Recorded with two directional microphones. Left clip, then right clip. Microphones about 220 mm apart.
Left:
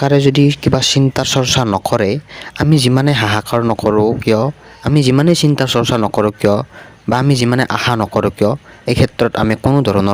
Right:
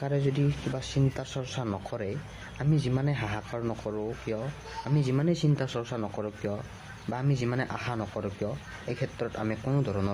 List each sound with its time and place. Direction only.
0.0 s speech: 45° left (ahead or behind)